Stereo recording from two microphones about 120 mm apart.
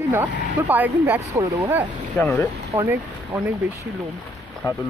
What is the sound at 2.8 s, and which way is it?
Speech, 20° right (ahead or behind).